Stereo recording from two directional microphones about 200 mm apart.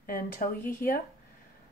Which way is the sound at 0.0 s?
45° left (ahead or behind).